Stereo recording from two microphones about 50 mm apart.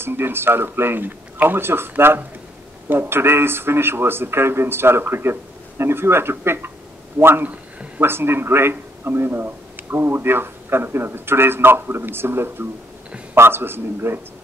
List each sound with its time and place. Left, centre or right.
0.0 s a man's voice: right